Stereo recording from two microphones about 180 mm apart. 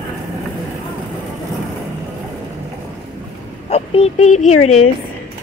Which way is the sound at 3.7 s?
35° left (ahead or behind).